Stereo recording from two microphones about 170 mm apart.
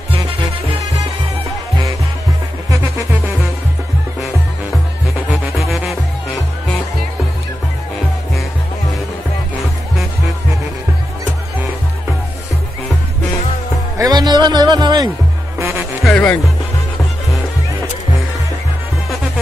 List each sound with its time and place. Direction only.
5.3 s music: centre (ahead or behind)
13.9 s music: 20° right (ahead or behind)
16.0 s insect: 5° left (ahead or behind)